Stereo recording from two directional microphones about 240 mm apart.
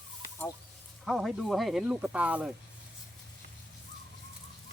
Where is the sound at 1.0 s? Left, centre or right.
Centre.